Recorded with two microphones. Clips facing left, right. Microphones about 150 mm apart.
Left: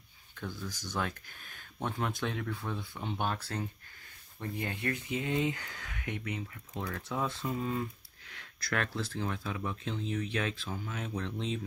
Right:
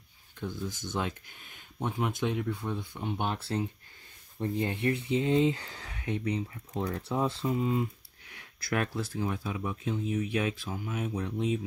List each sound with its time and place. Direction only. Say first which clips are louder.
0.4 s speech: right 4 dB; 20° right (ahead or behind)
3.3 s speech: right 4 dB; 25° right (ahead or behind)
8.8 s speech: right 3 dB; 10° right (ahead or behind)